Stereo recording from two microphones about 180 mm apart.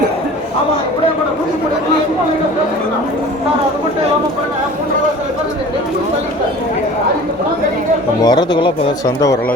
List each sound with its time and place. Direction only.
8.2 s speech: 25° left (ahead or behind)